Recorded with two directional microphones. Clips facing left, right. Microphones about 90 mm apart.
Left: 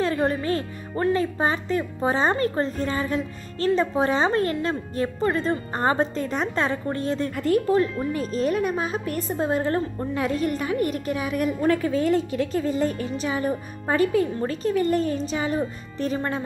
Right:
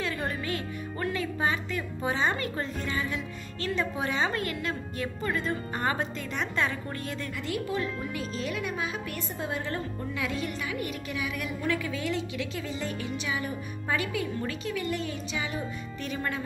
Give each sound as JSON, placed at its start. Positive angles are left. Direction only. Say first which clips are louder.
{"t": 0.0, "sound": "speech", "louder": "left 9 dB", "side_deg": 35}
{"t": 7.3, "sound": "speech", "louder": "left 11 dB", "side_deg": 45}